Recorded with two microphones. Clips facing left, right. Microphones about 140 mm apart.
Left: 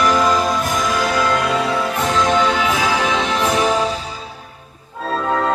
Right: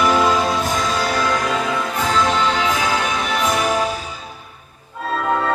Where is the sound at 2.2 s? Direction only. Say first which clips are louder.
Left 2 dB; 15° left (ahead or behind).